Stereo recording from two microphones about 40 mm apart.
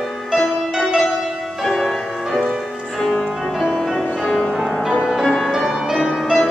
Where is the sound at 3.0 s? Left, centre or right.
Centre.